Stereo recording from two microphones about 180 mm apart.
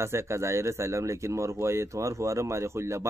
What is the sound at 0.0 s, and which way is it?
Speech, 15° right (ahead or behind).